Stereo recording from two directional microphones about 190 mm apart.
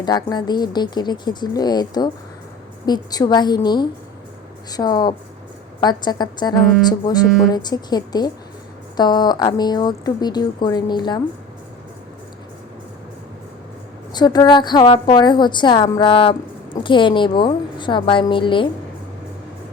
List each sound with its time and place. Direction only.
0.0 s speech: 20° left (ahead or behind)
14.1 s speech: 20° left (ahead or behind)